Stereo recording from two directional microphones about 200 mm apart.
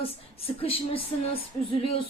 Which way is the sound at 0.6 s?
30° left (ahead or behind).